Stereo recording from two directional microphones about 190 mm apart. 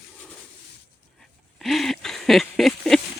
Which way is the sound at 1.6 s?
Centre (ahead or behind).